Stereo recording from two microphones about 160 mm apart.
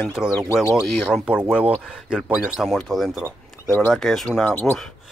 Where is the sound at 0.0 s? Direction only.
5° right (ahead or behind).